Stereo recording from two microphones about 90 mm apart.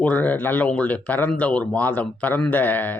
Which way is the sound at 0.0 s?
20° left (ahead or behind).